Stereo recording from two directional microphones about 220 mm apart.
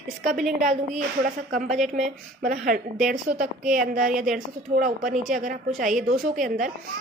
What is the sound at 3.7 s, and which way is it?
Speech, centre (ahead or behind).